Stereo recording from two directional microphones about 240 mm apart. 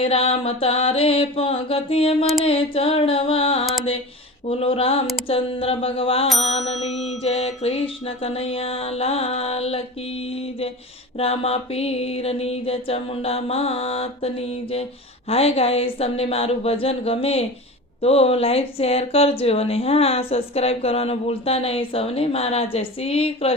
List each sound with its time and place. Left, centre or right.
0.0 s speech: left